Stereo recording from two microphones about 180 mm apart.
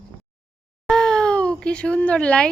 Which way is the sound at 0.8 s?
5° left (ahead or behind).